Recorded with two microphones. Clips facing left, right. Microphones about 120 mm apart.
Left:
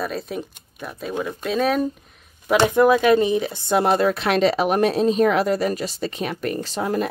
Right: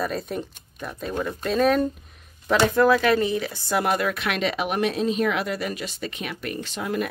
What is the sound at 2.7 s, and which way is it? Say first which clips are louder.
Speech: left 4 dB; 20° left (ahead or behind).